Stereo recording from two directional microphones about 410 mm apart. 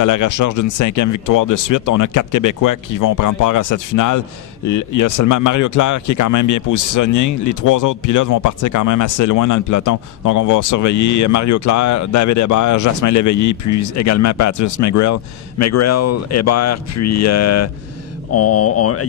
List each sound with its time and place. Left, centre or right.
0.0 s speech: left